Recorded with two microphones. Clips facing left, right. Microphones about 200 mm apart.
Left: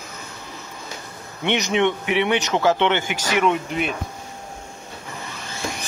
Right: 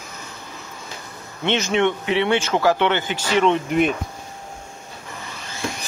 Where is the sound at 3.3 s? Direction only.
10° left (ahead or behind).